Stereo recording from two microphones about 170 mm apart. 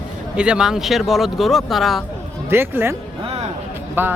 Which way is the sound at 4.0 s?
10° right (ahead or behind).